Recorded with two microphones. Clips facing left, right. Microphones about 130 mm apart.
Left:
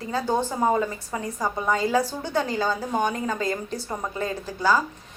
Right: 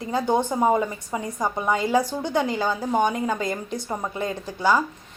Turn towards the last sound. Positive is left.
turn(degrees=-15)  # may be behind; listen again after turning